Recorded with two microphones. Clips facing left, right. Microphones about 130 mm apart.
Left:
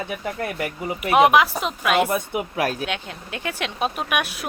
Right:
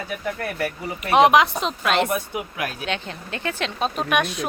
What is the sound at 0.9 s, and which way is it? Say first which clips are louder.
Speech: even; 5° left (ahead or behind).